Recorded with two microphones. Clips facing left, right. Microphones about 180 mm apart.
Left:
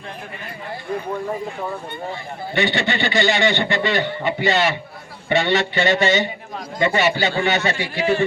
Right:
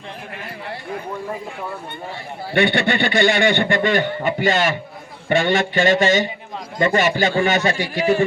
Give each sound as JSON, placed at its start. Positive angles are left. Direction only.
{"t": 2.6, "sound": "a man's voice", "side_deg": -55}